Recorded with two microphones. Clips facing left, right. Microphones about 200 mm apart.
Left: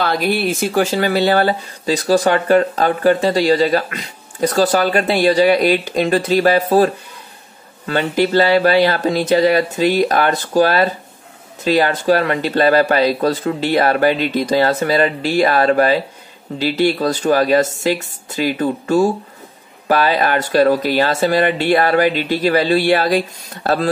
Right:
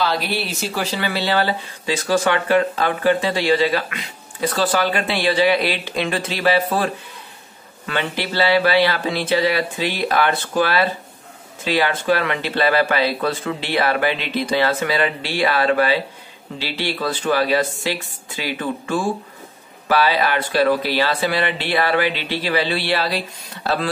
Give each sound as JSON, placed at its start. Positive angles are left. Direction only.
{"t": 0.0, "sound": "speech", "side_deg": 50}